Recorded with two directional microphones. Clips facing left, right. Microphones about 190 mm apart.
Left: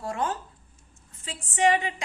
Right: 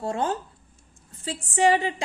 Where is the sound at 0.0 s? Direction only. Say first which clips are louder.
Right 3 dB; 25° right (ahead or behind).